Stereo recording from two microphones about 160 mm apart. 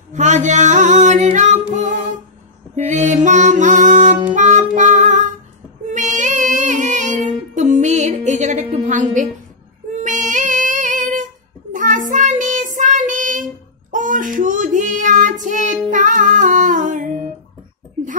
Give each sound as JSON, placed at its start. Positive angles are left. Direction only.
{"t": 0.1, "sound": "singing", "side_deg": -50}
{"t": 1.7, "sound": "music", "side_deg": -50}
{"t": 5.9, "sound": "child singing", "side_deg": -50}
{"t": 9.9, "sound": "female singing", "side_deg": -50}
{"t": 11.7, "sound": "child singing", "side_deg": -55}